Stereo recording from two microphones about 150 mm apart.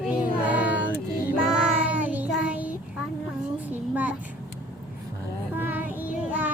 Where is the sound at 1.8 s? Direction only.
10° right (ahead or behind).